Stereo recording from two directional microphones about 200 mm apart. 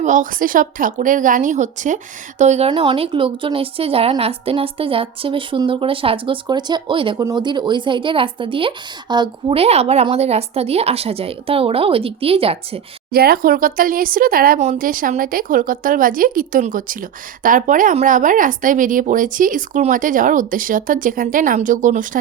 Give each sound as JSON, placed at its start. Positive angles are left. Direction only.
{"t": 0.0, "sound": "a woman's voice", "side_deg": -40}
{"t": 13.1, "sound": "speech", "side_deg": -50}